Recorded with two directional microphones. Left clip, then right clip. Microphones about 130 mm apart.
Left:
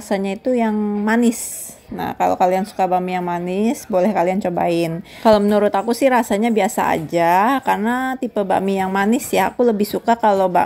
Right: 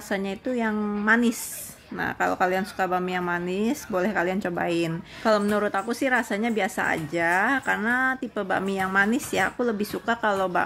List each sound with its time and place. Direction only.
0.1 s speech: 35° left (ahead or behind)